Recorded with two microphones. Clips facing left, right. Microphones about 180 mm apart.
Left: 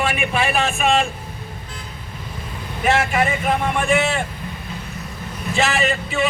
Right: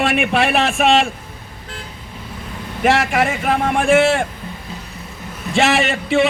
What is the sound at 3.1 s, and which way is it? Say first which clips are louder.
Speech: right 2 dB; 70° right (ahead or behind).